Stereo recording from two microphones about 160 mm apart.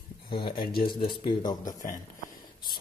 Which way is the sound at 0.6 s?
70° left (ahead or behind).